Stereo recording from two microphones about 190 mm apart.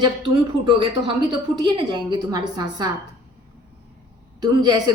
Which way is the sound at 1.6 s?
25° right (ahead or behind).